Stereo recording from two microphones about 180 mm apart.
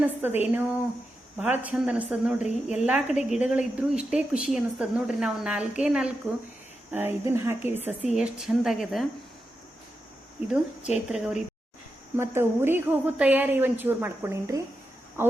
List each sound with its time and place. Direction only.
0.0 s a woman's voice: 10° right (ahead or behind)
2.5 s a woman's voice: 40° left (ahead or behind)
2.8 s a woman's voice: 5° right (ahead or behind)
11.1 s speech: 5° right (ahead or behind)
12.1 s a woman's voice: 15° right (ahead or behind)